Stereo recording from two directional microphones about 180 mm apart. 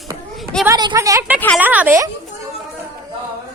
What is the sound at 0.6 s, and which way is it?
A woman's voice, 20° right (ahead or behind).